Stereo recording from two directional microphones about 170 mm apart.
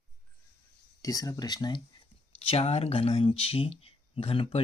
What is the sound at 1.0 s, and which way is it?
Speech, 20° left (ahead or behind).